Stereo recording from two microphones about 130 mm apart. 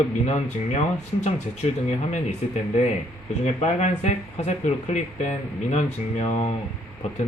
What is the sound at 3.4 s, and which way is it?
Speech, 60° left (ahead or behind).